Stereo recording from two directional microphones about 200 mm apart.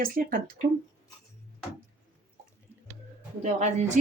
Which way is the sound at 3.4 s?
35° right (ahead or behind).